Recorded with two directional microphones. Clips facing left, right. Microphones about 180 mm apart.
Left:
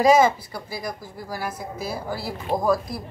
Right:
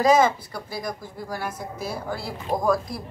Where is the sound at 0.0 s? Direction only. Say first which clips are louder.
Left 2 dB; 10° left (ahead or behind).